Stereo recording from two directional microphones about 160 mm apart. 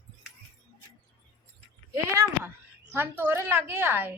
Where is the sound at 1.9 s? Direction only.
20° right (ahead or behind).